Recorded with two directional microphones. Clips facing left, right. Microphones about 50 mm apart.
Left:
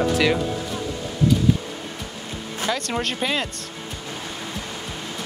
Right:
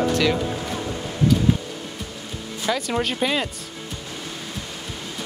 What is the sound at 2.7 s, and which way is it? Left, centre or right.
Speech, centre.